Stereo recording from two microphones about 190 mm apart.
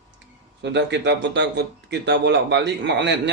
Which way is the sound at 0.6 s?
65° right (ahead or behind).